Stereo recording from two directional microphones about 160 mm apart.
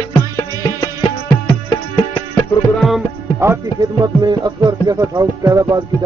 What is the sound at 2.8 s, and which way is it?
Music, centre (ahead or behind).